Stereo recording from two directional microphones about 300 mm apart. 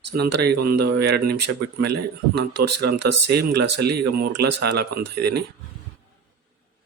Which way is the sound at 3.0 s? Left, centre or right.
Right.